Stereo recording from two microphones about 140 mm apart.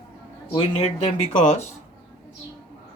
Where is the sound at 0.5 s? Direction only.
40° left (ahead or behind).